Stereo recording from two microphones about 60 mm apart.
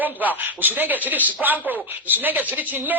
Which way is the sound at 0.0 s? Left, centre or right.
Right.